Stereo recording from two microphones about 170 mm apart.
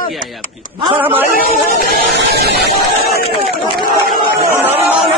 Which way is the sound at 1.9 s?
75° right (ahead or behind).